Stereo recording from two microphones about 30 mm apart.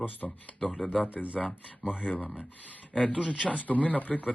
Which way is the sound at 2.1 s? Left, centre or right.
Left.